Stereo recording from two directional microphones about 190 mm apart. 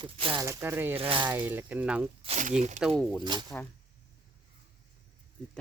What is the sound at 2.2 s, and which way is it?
Speech, 35° right (ahead or behind).